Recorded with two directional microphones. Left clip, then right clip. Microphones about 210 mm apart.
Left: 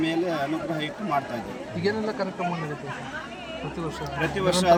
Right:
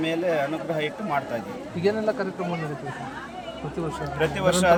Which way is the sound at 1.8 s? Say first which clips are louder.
Right 3 dB; 35° right (ahead or behind).